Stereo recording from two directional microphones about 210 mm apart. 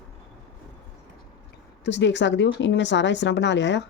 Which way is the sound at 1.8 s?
55° left (ahead or behind).